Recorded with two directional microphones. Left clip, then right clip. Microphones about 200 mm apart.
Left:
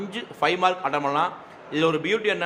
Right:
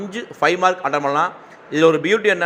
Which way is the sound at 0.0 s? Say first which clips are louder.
Right 6 dB; 15° right (ahead or behind).